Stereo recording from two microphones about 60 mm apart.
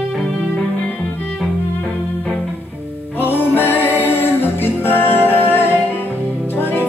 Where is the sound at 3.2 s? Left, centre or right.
Left.